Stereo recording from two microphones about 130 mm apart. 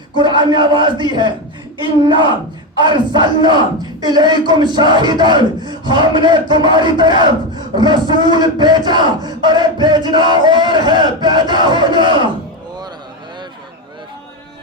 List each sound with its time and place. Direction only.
0.2 s crowd: 35° right (ahead or behind)